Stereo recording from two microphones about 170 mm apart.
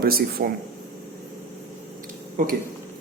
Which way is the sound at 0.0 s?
60° right (ahead or behind).